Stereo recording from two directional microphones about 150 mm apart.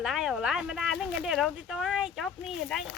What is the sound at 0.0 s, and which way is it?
Speech, centre (ahead or behind).